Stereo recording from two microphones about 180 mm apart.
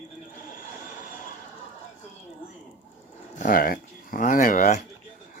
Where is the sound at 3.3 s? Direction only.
50° left (ahead or behind).